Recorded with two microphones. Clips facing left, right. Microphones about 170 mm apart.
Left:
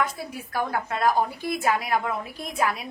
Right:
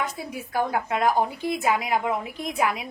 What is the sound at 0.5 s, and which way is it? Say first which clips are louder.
A woman's voice: right 3 dB; 20° right (ahead or behind).